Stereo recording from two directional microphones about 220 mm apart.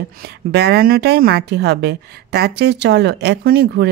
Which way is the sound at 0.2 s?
50° right (ahead or behind).